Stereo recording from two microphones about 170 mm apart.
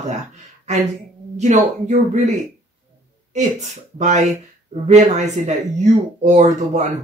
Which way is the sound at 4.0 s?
45° right (ahead or behind).